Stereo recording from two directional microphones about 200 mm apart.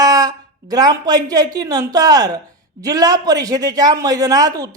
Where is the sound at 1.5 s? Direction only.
15° right (ahead or behind).